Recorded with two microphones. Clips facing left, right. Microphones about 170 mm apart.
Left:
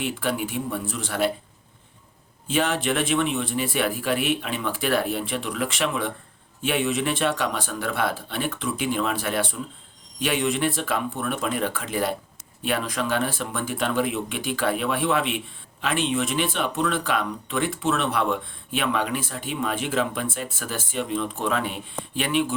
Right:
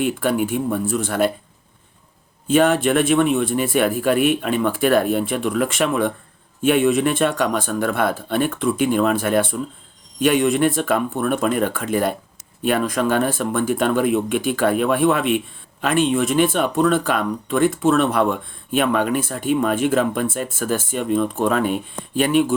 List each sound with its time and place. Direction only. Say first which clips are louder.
0.0 s speech: right 7 dB; 50° right (ahead or behind)
2.5 s speech: right 8 dB; 50° right (ahead or behind)